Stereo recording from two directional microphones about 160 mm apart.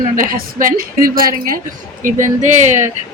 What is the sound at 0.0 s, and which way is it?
A woman's voice, 60° right (ahead or behind).